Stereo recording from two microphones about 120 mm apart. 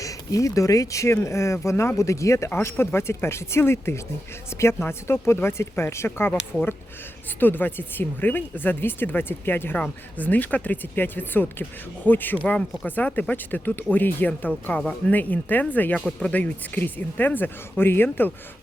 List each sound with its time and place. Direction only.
0.0 s speech: 30° left (ahead or behind)